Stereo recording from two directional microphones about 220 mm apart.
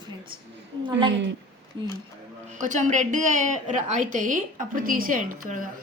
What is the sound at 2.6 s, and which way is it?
A woman's voice, 35° right (ahead or behind).